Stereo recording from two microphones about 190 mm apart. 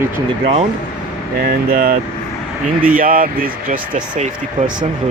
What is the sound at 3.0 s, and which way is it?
Speech, 45° right (ahead or behind).